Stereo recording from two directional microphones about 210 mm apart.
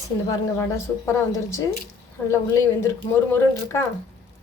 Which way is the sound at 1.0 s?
15° left (ahead or behind).